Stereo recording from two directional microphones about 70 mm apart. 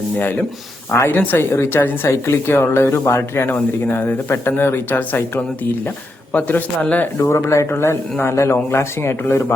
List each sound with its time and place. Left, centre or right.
1.0 s a woman's voice: left
6.8 s speech: left
7.2 s a woman's voice: left